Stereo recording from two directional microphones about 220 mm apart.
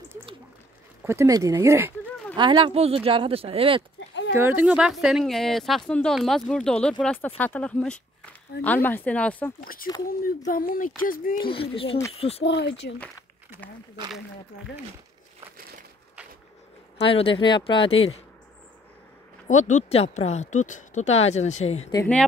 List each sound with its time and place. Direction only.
1.0 s speech: 15° right (ahead or behind)
4.4 s speech: 10° right (ahead or behind)
10.0 s speech: 40° left (ahead or behind)
11.3 s speech: 25° left (ahead or behind)
12.4 s speech: 50° left (ahead or behind)
17.1 s speech: 25° left (ahead or behind)
19.4 s speech: 30° left (ahead or behind)
21.9 s speech: 10° left (ahead or behind)